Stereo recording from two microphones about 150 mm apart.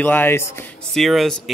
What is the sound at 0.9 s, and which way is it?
Speech, centre (ahead or behind).